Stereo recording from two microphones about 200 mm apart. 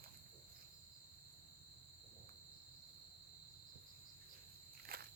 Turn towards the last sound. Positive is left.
turn(degrees=-45)  # may be behind; listen again after turning